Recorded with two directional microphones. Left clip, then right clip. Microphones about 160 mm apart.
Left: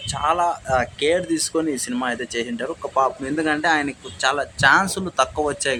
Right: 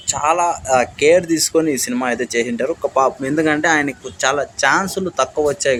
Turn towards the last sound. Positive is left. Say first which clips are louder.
# right 6 dB
turn(degrees=-15)  # may be behind; listen again after turning